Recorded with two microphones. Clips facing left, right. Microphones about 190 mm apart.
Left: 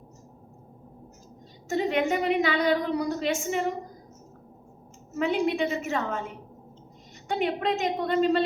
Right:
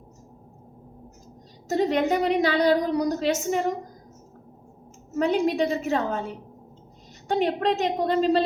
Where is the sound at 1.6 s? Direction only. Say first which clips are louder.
Right 3 dB; 40° right (ahead or behind).